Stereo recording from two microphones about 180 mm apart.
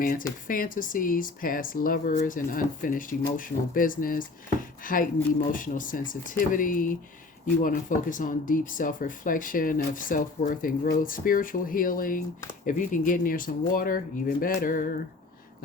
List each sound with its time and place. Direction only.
0.0 s speech: 50° left (ahead or behind)